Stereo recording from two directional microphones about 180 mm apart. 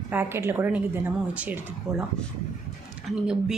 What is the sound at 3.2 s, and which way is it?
Speech, 5° right (ahead or behind).